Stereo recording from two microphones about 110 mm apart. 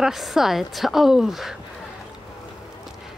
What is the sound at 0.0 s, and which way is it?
Speech, centre (ahead or behind).